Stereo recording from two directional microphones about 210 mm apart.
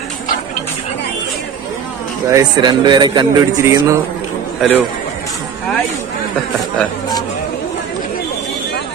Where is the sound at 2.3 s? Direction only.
20° right (ahead or behind).